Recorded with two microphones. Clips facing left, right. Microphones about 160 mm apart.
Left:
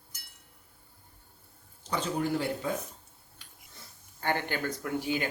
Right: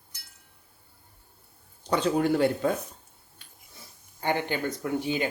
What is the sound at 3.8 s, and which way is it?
Speech, 15° right (ahead or behind).